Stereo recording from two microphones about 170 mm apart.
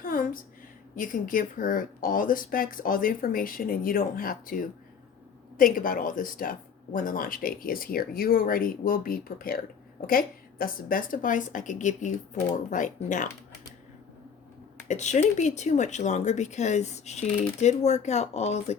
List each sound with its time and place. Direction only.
0.0 s a sound: 55° left (ahead or behind)
0.9 s speech: 50° left (ahead or behind)
14.8 s speech: 45° left (ahead or behind)